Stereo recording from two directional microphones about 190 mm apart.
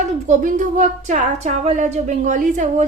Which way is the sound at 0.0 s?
40° right (ahead or behind).